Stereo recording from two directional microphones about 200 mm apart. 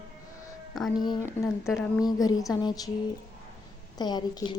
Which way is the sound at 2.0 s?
20° left (ahead or behind).